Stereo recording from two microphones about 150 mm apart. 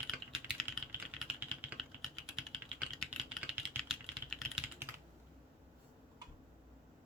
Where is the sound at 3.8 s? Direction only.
Centre (ahead or behind).